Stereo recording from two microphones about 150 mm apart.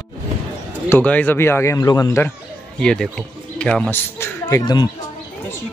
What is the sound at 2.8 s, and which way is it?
Speech, 5° left (ahead or behind).